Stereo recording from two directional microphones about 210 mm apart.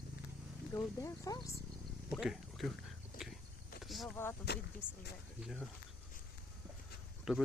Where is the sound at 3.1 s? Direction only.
45° left (ahead or behind).